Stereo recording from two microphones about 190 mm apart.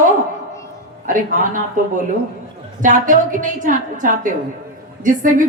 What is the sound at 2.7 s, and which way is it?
A woman's voice, 45° right (ahead or behind).